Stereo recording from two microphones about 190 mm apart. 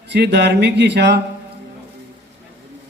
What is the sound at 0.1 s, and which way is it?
A man's voice, 65° right (ahead or behind).